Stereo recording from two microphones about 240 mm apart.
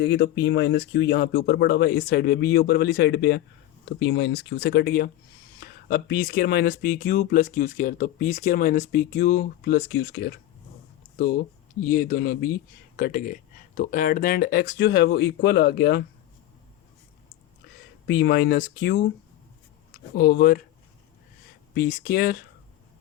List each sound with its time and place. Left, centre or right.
0.0 s speech: left
11.9 s speech: left
18.1 s speech: left
20.1 s speech: left
21.8 s speech: left